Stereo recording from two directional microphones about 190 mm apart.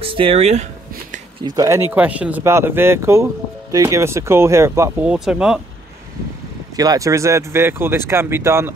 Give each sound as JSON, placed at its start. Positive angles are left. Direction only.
{"t": 0.0, "sound": "speech", "side_deg": -30}
{"t": 1.4, "sound": "speech", "side_deg": -20}
{"t": 6.8, "sound": "speech", "side_deg": -20}